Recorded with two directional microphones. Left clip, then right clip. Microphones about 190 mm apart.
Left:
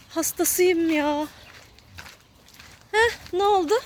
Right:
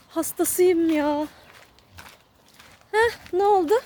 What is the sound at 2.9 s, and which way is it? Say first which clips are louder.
Speech: even; 15° right (ahead or behind).